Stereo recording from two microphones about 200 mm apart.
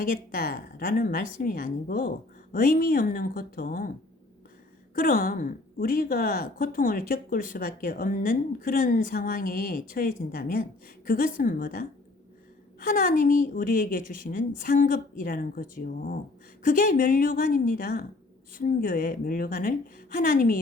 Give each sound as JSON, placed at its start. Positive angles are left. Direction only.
{"t": 0.0, "sound": "a woman's voice", "side_deg": 45}
{"t": 4.9, "sound": "a woman's voice", "side_deg": 45}